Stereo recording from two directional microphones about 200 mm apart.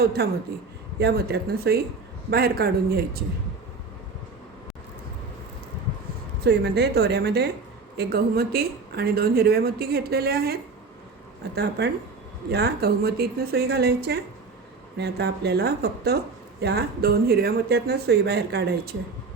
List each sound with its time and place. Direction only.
0.0 s a woman's voice: 50° right (ahead or behind)
6.4 s a woman's voice: 55° right (ahead or behind)